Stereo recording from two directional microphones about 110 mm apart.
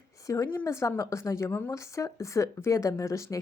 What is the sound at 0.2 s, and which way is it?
A woman's voice, 30° left (ahead or behind).